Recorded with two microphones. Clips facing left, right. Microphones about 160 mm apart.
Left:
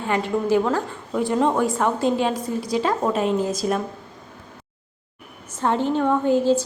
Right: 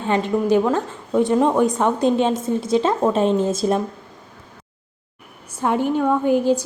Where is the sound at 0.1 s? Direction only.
20° right (ahead or behind).